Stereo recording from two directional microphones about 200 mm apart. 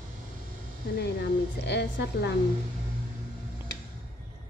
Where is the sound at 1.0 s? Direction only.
60° left (ahead or behind).